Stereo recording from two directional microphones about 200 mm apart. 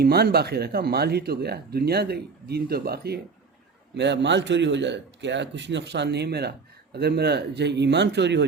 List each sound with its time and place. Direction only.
0.0 s speech: 50° right (ahead or behind)